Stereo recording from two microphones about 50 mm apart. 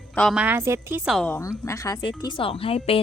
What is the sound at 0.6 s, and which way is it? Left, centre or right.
Speech, right.